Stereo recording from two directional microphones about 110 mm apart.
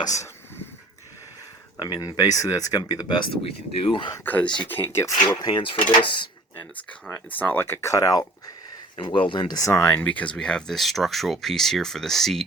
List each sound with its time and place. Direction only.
0.0 s speech: 30° left (ahead or behind)
1.8 s speech: 40° left (ahead or behind)
3.2 s speech: 55° left (ahead or behind)
4.3 s speech: 10° left (ahead or behind)
5.4 s speech: 40° left (ahead or behind)
5.9 s speech: 50° left (ahead or behind)
7.1 s speech: 15° left (ahead or behind); by 8.3 s 30° left (ahead or behind)
9.0 s speech: 50° left (ahead or behind)
9.6 s speech: 30° left (ahead or behind)
9.9 s speech: 15° left (ahead or behind)